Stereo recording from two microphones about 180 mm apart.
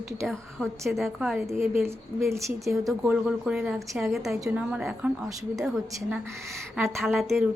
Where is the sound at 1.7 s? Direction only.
15° right (ahead or behind).